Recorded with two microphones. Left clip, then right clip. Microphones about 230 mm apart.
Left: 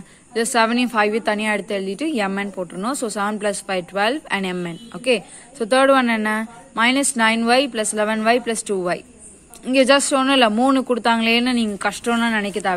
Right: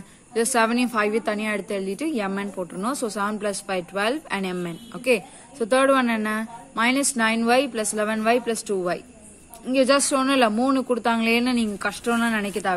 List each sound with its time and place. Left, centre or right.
0.3 s a woman's voice: centre